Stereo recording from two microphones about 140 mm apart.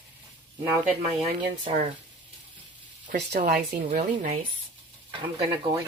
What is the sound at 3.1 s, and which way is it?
Speech, 80° right.